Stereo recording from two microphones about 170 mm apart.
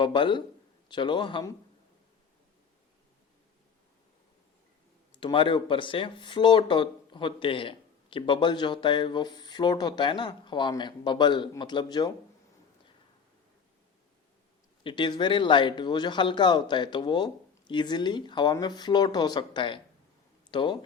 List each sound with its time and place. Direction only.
0.0 s speech: 30° left (ahead or behind)
5.1 s speech: 30° left (ahead or behind)
14.8 s speech: 25° left (ahead or behind)